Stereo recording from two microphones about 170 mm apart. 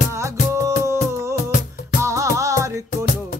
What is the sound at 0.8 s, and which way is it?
Music, 15° right (ahead or behind).